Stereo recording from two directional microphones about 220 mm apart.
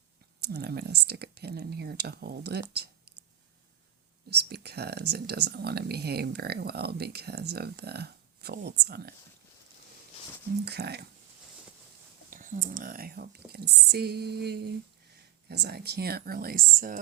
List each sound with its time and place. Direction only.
0.4 s speech: 50° right (ahead or behind)
4.3 s speech: 45° right (ahead or behind)
10.7 s speech: 45° right (ahead or behind)
12.3 s speech: 35° right (ahead or behind)